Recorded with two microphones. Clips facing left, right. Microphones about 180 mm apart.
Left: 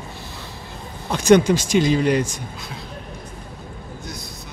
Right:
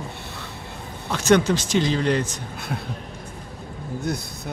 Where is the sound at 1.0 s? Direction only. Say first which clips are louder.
Left 4 dB; 15° left (ahead or behind).